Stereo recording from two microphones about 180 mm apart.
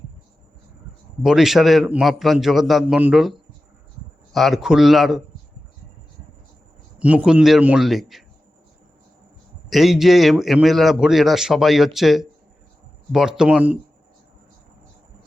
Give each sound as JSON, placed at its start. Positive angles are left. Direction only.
{"t": 1.2, "sound": "a man's voice", "side_deg": -5}
{"t": 7.0, "sound": "a man's voice", "side_deg": -5}
{"t": 9.6, "sound": "a man's voice", "side_deg": 0}